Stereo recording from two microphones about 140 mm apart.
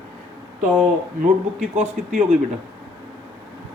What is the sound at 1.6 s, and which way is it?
Speech, 60° right (ahead or behind).